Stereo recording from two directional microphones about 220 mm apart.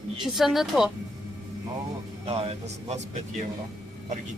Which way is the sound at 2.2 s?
25° right (ahead or behind).